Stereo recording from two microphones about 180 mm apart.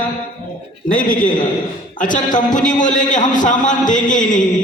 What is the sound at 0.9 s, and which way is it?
A man's voice, 50° left (ahead or behind).